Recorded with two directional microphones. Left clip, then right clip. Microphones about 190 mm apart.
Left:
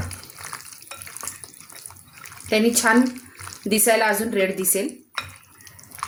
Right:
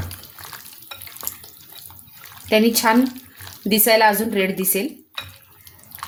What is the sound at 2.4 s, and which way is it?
A woman's voice, 55° right (ahead or behind).